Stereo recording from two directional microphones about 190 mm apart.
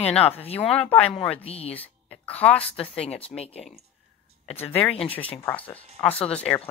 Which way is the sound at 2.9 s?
30° left (ahead or behind).